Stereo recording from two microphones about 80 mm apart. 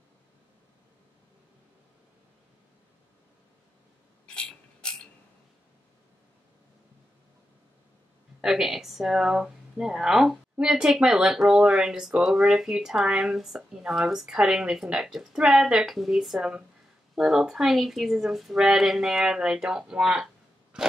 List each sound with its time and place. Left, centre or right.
4.3 s mechanisms: centre
8.4 s a woman's voice: centre